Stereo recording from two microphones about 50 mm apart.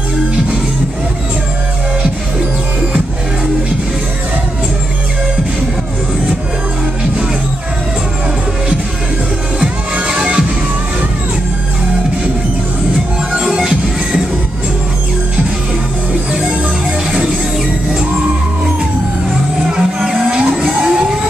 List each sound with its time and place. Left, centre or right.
9.6 s music: centre
13.3 s music: centre
19.7 s a sound: centre